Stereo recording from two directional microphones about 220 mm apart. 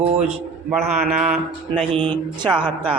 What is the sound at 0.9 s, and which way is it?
Mantra, centre (ahead or behind).